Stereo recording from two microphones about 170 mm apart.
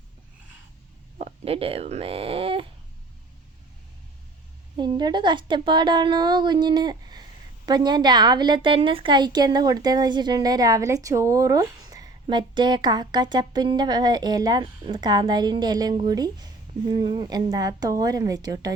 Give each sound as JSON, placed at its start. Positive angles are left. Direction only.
{"t": 1.2, "sound": "speech", "side_deg": -35}
{"t": 4.8, "sound": "a woman's voice", "side_deg": -25}